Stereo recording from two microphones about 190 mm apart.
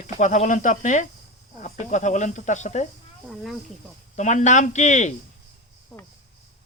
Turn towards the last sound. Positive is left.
turn(degrees=0)  # may be behind; listen again after turning